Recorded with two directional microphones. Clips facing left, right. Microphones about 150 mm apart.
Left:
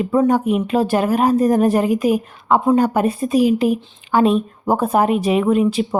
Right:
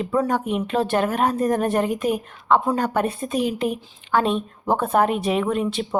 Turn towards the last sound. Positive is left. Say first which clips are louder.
# left 6 dB
turn(degrees=5)  # may be behind; listen again after turning